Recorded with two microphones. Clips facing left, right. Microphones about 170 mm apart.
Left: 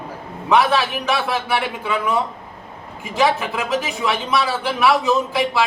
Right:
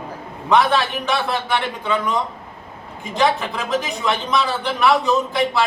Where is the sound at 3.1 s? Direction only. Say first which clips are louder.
Left 1 dB; 5° left (ahead or behind).